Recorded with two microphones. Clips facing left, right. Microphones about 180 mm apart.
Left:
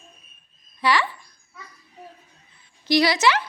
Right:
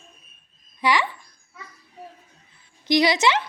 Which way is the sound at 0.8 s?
15° right (ahead or behind).